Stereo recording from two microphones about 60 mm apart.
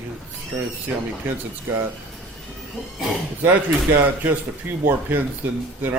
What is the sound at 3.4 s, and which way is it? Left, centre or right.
A man's voice, right.